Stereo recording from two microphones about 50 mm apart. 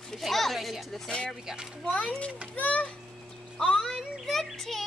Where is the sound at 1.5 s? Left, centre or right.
Centre.